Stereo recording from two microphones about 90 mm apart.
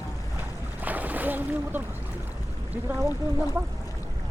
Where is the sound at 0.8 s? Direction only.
20° right (ahead or behind).